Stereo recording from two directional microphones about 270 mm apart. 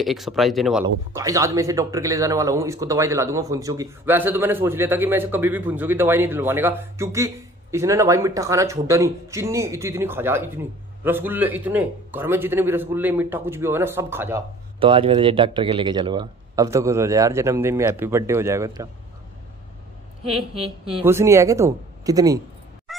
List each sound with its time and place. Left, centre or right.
0.0 s speech: centre
14.8 s speech: centre
20.5 s speech: right
20.9 s speech: centre
22.9 s music: centre